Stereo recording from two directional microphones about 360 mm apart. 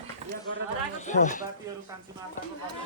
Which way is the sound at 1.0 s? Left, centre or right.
Centre.